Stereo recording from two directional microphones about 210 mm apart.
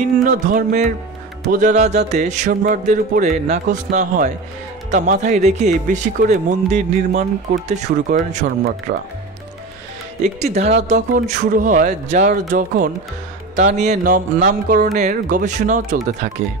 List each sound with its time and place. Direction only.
0.2 s speech: 35° right (ahead or behind)
8.9 s speech: 45° right (ahead or behind)
10.2 s speech: 30° right (ahead or behind)